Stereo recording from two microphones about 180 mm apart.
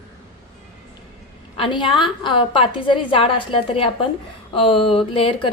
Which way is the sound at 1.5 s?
25° left (ahead or behind).